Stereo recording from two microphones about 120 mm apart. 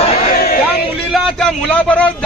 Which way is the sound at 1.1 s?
Centre (ahead or behind).